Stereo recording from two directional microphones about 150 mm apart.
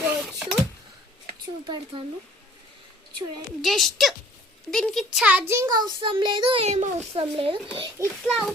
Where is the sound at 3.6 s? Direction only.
Centre (ahead or behind); by 7.5 s 40° right (ahead or behind).